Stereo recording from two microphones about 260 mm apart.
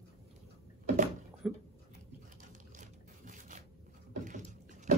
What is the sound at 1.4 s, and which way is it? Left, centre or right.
Speech, centre.